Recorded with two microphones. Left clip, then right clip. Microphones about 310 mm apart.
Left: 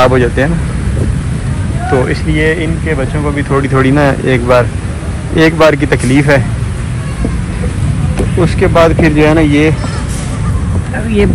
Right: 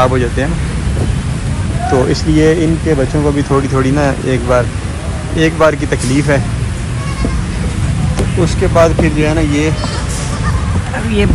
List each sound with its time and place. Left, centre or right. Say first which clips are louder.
0.0 s speech: left 4 dB; centre
2.3 s speech: right 2 dB; right
3.5 s speech: left 7 dB; centre
8.4 s speech: left 2 dB; centre